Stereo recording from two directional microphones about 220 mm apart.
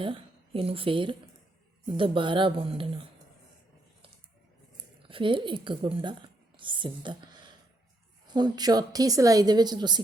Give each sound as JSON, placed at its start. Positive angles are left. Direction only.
{"t": 0.0, "sound": "a woman's voice", "side_deg": -25}
{"t": 5.0, "sound": "speech", "side_deg": -20}
{"t": 8.3, "sound": "a woman's voice", "side_deg": -20}